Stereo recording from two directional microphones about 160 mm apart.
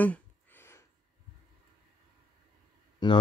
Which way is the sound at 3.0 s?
30° left (ahead or behind).